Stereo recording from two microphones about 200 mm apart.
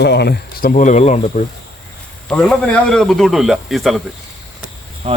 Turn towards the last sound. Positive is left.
turn(degrees=-30)  # may be behind; listen again after turning